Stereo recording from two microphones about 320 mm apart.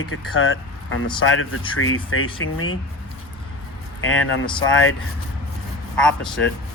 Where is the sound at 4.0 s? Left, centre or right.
Left.